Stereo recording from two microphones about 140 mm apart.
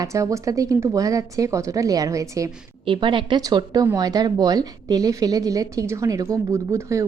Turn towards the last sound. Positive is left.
turn(degrees=-20)  # may be behind; listen again after turning